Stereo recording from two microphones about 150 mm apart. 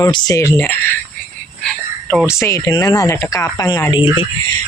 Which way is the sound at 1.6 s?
5° left (ahead or behind).